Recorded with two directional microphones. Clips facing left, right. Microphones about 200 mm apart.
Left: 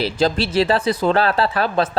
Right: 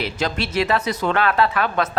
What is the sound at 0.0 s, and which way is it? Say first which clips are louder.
Speech: left 5 dB; 30° left (ahead or behind).